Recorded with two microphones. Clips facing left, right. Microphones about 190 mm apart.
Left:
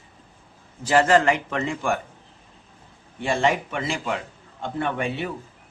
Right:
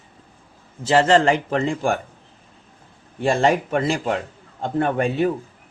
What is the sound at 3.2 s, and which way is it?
A man's voice, 40° right (ahead or behind).